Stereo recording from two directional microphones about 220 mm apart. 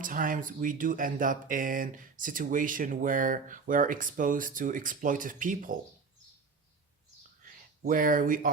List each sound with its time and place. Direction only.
0.0 s speech: 40° right (ahead or behind)
7.4 s speech: 40° right (ahead or behind)